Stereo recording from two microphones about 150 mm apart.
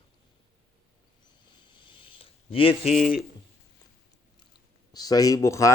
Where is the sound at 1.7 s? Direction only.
30° left (ahead or behind).